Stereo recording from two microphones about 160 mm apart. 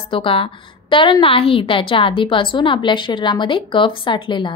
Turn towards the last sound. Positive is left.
turn(degrees=30)  # may be behind; listen again after turning